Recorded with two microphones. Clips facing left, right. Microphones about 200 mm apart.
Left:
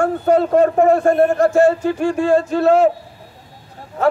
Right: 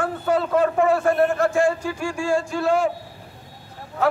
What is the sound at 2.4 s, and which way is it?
Speech, 40° left (ahead or behind).